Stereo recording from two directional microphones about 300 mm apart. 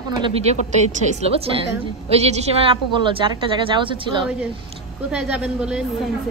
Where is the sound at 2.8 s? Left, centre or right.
Centre.